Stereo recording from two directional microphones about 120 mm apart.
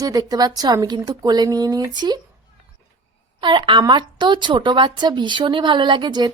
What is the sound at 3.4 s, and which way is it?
A woman's voice, 40° right (ahead or behind).